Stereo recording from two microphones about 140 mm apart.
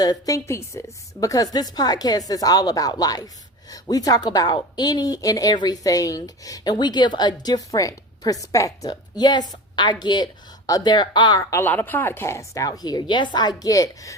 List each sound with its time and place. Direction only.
0.0 s a woman's voice: 25° left (ahead or behind)
11.6 s a woman's voice: 15° left (ahead or behind)